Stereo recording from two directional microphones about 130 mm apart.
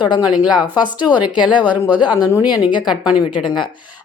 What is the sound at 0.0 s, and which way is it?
Speech, 35° left (ahead or behind).